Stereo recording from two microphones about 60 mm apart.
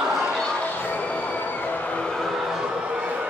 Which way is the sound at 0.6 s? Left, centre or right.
Left.